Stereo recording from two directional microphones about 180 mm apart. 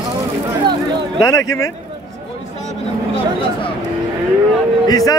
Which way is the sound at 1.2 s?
20° left (ahead or behind).